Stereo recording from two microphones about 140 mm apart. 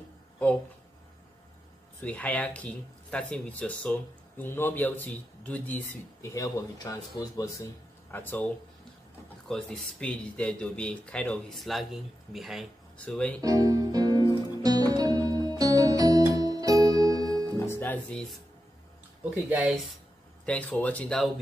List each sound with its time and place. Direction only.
2.0 s speech: 10° left (ahead or behind)
8.1 s speech: 15° left (ahead or behind)
9.5 s speech: 5° left (ahead or behind)
13.4 s music: 25° right (ahead or behind)
17.6 s music: 15° left (ahead or behind)
19.3 s speech: 10° right (ahead or behind)
20.4 s speech: 10° left (ahead or behind)